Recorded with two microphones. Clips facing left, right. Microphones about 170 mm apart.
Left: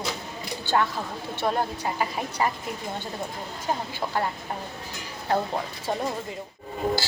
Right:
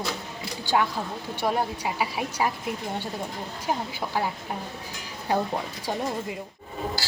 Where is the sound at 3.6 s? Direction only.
10° right (ahead or behind).